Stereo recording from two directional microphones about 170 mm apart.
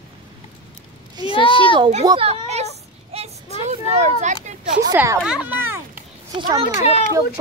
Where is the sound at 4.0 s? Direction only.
45° right (ahead or behind).